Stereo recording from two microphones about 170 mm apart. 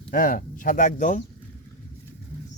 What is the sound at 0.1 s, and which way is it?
Speech, 55° left (ahead or behind).